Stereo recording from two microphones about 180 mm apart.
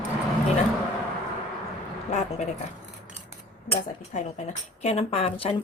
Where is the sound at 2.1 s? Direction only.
40° left (ahead or behind).